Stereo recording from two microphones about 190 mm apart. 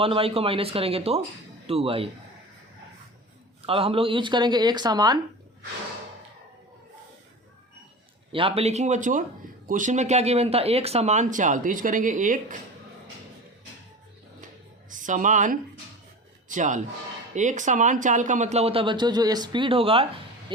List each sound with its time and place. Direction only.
0.0 s speech: 30° right (ahead or behind)
3.7 s speech: 30° right (ahead or behind)
8.3 s speech: 30° right (ahead or behind)
14.8 s speech: 40° right (ahead or behind)